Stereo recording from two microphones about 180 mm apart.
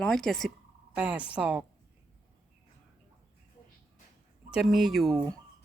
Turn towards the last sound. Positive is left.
turn(degrees=0)  # may be behind; listen again after turning